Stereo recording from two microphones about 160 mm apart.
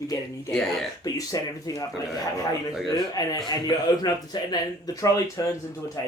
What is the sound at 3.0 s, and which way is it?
Speech, 20° left (ahead or behind).